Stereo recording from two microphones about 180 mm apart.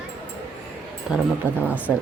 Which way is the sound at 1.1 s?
5° right (ahead or behind).